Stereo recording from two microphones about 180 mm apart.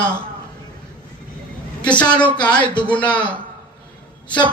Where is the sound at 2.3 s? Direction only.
10° left (ahead or behind).